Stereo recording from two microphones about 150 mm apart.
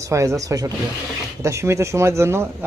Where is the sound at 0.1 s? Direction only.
20° right (ahead or behind).